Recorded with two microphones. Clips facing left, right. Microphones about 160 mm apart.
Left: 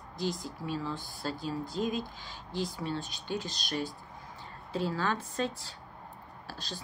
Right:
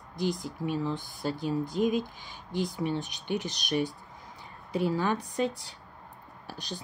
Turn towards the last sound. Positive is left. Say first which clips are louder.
# right 2 dB
turn(degrees=-15)  # may be behind; listen again after turning